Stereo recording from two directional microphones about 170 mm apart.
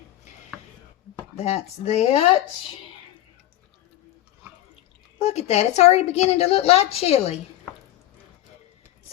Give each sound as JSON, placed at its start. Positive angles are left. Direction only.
{"t": 1.4, "sound": "a woman's voice", "side_deg": 35}
{"t": 5.2, "sound": "a woman's voice", "side_deg": 40}